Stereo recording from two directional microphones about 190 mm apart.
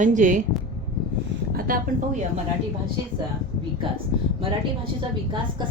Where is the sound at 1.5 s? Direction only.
50° right (ahead or behind).